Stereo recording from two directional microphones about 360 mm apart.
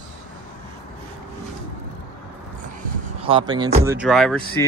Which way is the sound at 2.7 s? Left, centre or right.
Centre.